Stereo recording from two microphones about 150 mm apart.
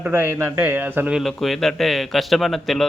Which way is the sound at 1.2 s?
Centre (ahead or behind).